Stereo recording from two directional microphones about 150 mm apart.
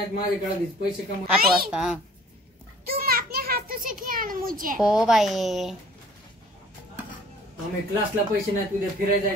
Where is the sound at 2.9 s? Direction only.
90° right; by 4.7 s 65° right (ahead or behind).